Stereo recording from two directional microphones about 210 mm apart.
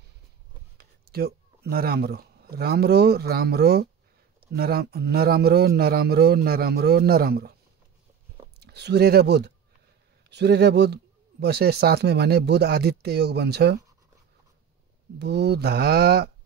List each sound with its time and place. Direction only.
0.7 s speech: 50° right (ahead or behind)
8.5 s speech: 50° right (ahead or behind)
15.1 s speech: 55° right (ahead or behind)